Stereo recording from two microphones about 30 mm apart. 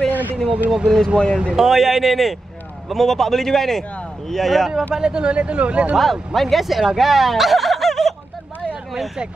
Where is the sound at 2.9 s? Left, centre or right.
Centre.